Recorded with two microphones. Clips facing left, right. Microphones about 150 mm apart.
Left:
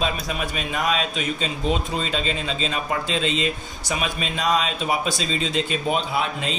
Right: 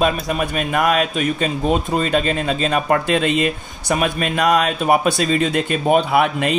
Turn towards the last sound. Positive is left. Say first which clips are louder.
# right 8 dB
turn(degrees=-65)  # may be behind; listen again after turning